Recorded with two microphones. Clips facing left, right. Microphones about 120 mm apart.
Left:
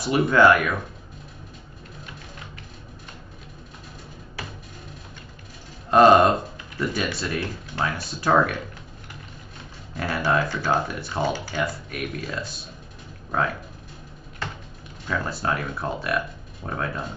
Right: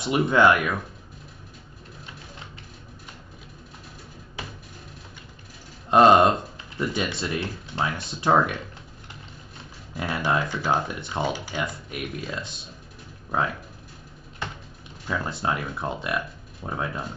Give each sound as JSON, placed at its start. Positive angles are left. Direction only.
{"t": 0.3, "sound": "speech", "side_deg": -20}
{"t": 4.4, "sound": "music", "side_deg": -20}
{"t": 5.9, "sound": "speech", "side_deg": -20}
{"t": 9.9, "sound": "speech", "side_deg": -20}
{"t": 15.0, "sound": "speech", "side_deg": -20}